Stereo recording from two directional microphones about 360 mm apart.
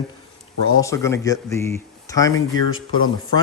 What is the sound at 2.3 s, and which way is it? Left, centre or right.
Speech, left.